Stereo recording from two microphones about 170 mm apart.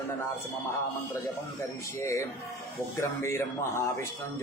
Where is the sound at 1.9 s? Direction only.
15° left (ahead or behind).